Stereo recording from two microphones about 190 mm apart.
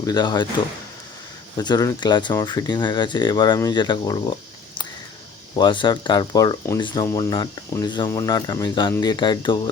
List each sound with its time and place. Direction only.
0.0 s speech: 20° left (ahead or behind)
1.5 s speech: 20° left (ahead or behind)
5.5 s speech: 25° left (ahead or behind)